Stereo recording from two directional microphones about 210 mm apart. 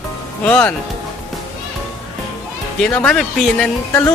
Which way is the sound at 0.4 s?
5° left (ahead or behind).